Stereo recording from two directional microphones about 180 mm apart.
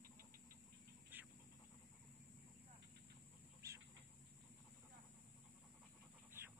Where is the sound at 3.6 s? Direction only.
15° right (ahead or behind).